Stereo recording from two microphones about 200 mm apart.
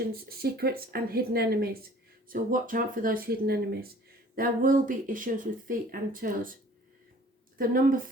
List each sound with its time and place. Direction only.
0.1 s speech: 50° right (ahead or behind)
7.6 s speech: 45° right (ahead or behind)